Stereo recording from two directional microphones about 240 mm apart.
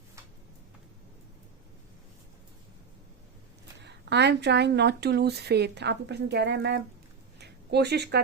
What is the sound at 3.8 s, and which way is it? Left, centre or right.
Speech, right.